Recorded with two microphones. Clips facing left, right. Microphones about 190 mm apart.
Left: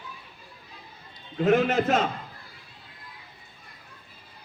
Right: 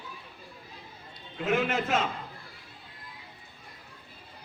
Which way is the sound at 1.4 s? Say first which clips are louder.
Left 6 dB; 40° left (ahead or behind).